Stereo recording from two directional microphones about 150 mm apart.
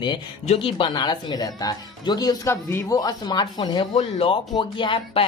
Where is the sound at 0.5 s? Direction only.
35° left (ahead or behind).